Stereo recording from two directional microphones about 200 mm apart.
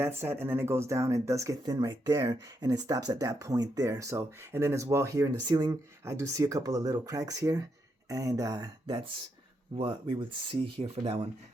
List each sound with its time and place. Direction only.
0.0 s speech: 10° right (ahead or behind)